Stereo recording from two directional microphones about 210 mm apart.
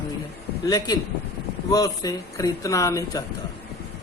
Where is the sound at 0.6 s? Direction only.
20° left (ahead or behind).